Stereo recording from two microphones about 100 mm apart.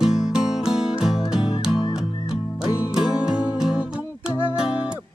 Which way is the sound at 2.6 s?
5° right (ahead or behind).